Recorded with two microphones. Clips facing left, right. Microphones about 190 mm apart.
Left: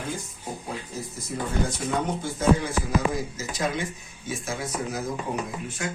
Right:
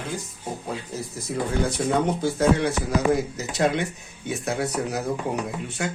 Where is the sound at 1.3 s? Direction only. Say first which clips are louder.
Right 4 dB; 70° right (ahead or behind).